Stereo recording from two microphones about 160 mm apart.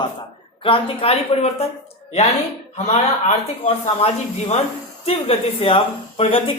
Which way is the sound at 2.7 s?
45° left (ahead or behind).